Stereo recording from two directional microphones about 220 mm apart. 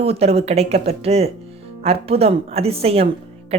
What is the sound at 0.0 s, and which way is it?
Speech, 25° right (ahead or behind).